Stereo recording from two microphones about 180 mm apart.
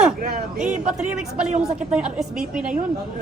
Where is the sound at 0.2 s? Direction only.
45° right (ahead or behind).